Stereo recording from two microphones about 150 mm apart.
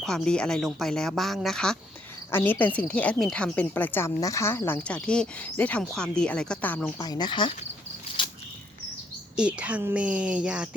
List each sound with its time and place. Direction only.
0.0 s speech: 5° left (ahead or behind)
7.0 s speech: 30° left (ahead or behind)
9.3 s a woman's voice: 5° right (ahead or behind)